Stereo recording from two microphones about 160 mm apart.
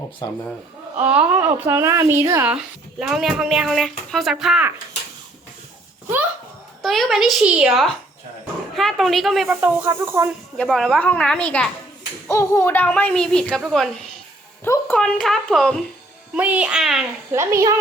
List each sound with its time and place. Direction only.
0.9 s a child's voice: 10° right (ahead or behind)
6.8 s a woman's voice: centre (ahead or behind)
9.6 s a child's voice: 10° right (ahead or behind)
10.6 s a woman's voice: 5° left (ahead or behind)
12.3 s a child's voice: 20° left (ahead or behind); by 13.8 s 5° right (ahead or behind)
14.6 s a woman's voice: 10° left (ahead or behind)
16.3 s a child's voice: 10° right (ahead or behind)
17.3 s a child's voice: 20° right (ahead or behind)